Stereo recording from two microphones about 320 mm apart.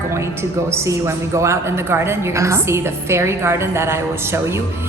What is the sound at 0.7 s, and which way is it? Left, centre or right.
A woman's voice, centre.